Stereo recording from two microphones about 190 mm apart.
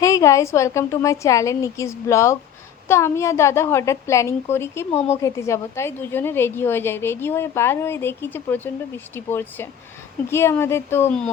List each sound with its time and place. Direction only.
0.0 s a woman's voice: 15° left (ahead or behind)
4.9 s speech: 35° left (ahead or behind)
5.1 s a woman's voice: 15° left (ahead or behind)